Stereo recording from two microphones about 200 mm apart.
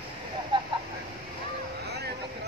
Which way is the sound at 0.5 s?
25° right (ahead or behind).